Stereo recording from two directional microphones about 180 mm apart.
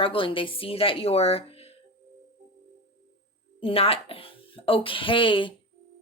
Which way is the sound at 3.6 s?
30° left (ahead or behind).